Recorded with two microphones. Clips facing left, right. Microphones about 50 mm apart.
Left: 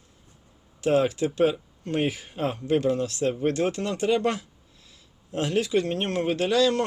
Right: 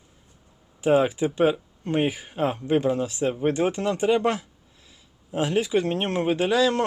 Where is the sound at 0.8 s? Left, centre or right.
Centre.